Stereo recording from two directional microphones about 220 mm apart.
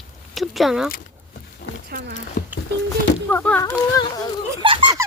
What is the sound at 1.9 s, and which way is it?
Speech, 45° right (ahead or behind).